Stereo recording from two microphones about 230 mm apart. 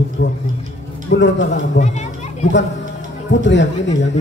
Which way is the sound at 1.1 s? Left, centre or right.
Left.